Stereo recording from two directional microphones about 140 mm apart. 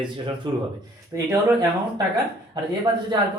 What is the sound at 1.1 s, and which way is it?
Speech, 20° right (ahead or behind).